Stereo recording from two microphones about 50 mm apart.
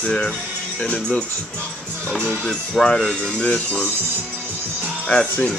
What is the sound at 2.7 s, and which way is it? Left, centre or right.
Speech, centre.